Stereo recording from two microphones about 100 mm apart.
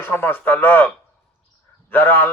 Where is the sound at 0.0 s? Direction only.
20° left (ahead or behind).